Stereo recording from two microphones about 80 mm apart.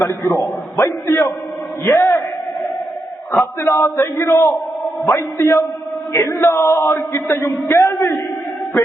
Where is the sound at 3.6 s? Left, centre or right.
Left.